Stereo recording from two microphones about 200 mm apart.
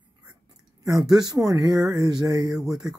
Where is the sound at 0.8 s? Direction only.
20° right (ahead or behind).